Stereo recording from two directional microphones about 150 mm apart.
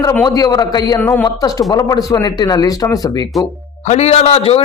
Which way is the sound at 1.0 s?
15° left (ahead or behind).